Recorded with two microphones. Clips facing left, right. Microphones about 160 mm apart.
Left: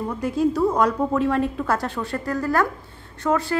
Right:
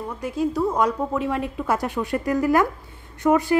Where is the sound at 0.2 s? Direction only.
15° right (ahead or behind).